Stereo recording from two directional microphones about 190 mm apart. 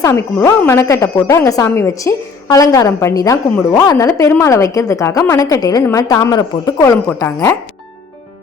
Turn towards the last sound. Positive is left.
turn(degrees=15)  # may be behind; listen again after turning